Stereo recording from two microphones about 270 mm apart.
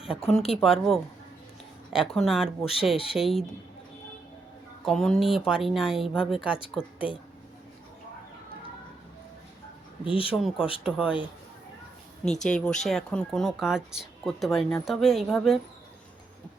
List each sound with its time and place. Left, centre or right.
0.1 s speech: centre
4.9 s speech: centre
10.0 s speech: centre
10.3 s speech: centre
12.2 s speech: centre